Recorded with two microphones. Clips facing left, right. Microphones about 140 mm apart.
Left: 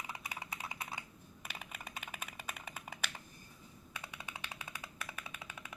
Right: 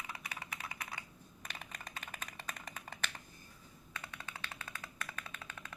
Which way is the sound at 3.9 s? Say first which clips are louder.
Even; 15° left (ahead or behind).